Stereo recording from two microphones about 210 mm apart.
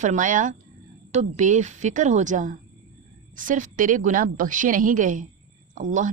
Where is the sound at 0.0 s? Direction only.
35° right (ahead or behind).